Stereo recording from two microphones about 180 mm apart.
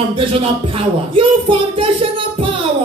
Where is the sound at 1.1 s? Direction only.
30° right (ahead or behind).